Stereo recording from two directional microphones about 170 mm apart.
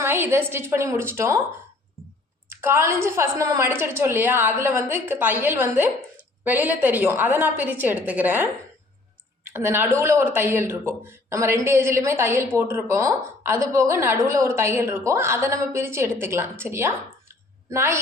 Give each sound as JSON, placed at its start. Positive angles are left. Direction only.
{"t": 0.0, "sound": "speech", "side_deg": -15}
{"t": 2.5, "sound": "speech", "side_deg": -15}
{"t": 9.5, "sound": "speech", "side_deg": -15}